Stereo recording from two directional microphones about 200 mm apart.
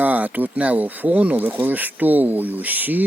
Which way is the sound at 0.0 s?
10° right (ahead or behind).